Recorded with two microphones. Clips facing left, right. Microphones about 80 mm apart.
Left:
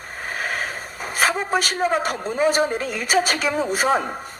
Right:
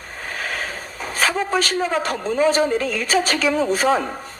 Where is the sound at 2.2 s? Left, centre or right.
Centre.